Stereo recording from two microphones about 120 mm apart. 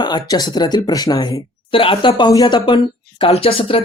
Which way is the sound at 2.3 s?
35° left (ahead or behind).